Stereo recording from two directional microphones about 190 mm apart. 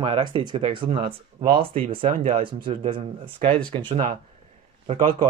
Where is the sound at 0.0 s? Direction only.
25° right (ahead or behind).